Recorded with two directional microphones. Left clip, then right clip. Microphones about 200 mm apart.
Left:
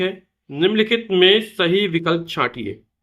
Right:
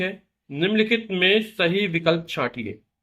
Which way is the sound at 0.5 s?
25° left (ahead or behind).